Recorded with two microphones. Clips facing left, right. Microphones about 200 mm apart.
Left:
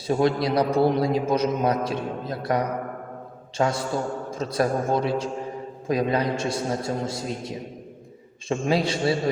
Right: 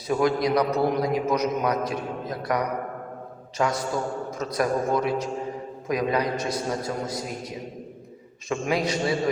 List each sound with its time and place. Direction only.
0.1 s a man's voice: 30° left (ahead or behind)